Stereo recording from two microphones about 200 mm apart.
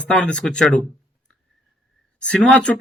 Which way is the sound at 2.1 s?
5° left (ahead or behind).